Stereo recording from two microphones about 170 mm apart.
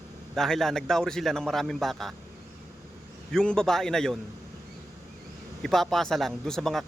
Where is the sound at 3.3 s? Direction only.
5° left (ahead or behind).